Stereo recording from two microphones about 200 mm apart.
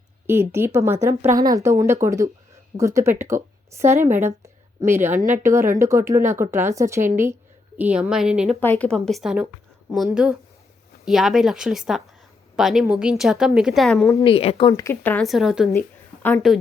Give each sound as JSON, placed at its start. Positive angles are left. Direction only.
{"t": 0.3, "sound": "a woman's voice", "side_deg": -10}
{"t": 5.1, "sound": "a woman's voice", "side_deg": -40}
{"t": 5.4, "sound": "a woman's voice", "side_deg": -15}
{"t": 14.3, "sound": "speech", "side_deg": 25}
{"t": 15.7, "sound": "a woman's voice", "side_deg": 10}